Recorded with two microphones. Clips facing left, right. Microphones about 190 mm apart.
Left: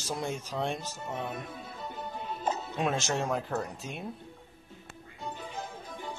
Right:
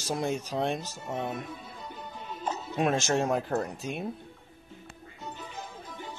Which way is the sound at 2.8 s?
15° right (ahead or behind).